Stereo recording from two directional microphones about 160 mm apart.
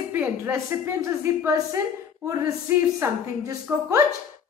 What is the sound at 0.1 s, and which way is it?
A woman's voice, 15° right (ahead or behind).